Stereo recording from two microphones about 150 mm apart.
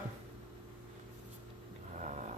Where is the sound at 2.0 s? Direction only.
50° right (ahead or behind).